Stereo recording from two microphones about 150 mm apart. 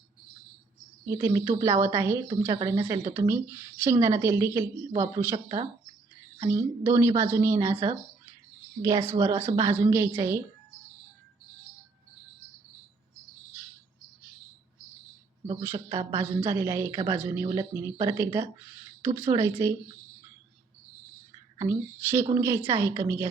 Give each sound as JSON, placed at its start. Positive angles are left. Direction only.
{"t": 1.0, "sound": "a woman's voice", "side_deg": -20}
{"t": 3.2, "sound": "a woman's voice", "side_deg": -15}
{"t": 15.6, "sound": "a woman's voice", "side_deg": -15}
{"t": 21.6, "sound": "speech", "side_deg": -20}